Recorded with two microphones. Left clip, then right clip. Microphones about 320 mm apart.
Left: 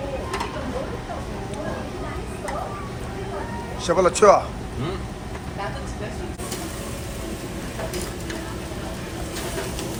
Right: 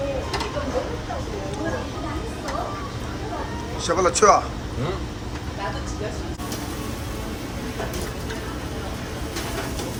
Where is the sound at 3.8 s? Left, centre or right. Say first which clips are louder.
Left 2 dB; centre.